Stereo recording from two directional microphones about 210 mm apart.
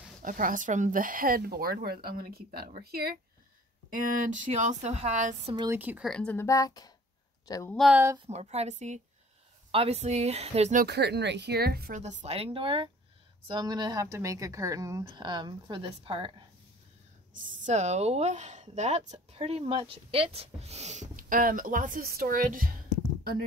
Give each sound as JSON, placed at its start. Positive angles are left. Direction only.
{"t": 0.2, "sound": "a woman's voice", "side_deg": -40}
{"t": 5.7, "sound": "speech", "side_deg": -10}
{"t": 6.0, "sound": "a woman's voice", "side_deg": 5}
{"t": 7.7, "sound": "speech", "side_deg": 0}
{"t": 8.3, "sound": "a woman's voice", "side_deg": -30}
{"t": 12.0, "sound": "a woman's voice", "side_deg": -35}
{"t": 17.4, "sound": "a woman's voice", "side_deg": -35}